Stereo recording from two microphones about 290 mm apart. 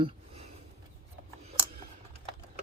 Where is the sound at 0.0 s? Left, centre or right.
Centre.